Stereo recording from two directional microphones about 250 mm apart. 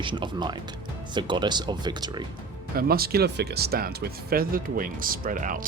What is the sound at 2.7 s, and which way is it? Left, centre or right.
Speech, right.